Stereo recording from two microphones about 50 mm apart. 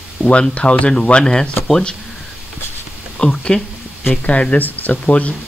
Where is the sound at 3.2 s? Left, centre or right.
Centre.